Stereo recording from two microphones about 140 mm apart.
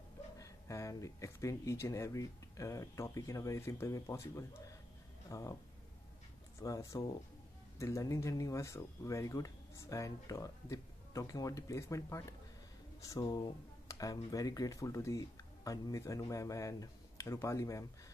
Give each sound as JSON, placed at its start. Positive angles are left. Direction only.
{"t": 0.4, "sound": "speech", "side_deg": 25}
{"t": 6.6, "sound": "speech", "side_deg": 25}